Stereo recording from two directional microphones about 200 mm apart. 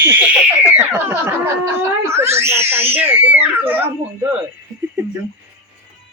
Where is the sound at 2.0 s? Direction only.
15° right (ahead or behind).